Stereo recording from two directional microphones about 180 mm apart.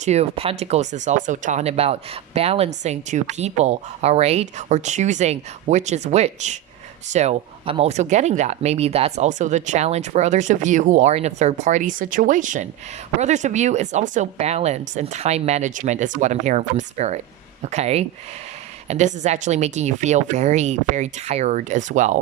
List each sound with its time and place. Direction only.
0.0 s speech: 35° right (ahead or behind)